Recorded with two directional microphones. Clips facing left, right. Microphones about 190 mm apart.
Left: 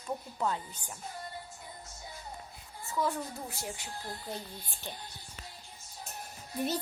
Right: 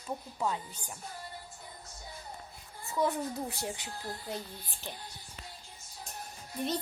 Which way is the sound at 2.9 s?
20° right (ahead or behind).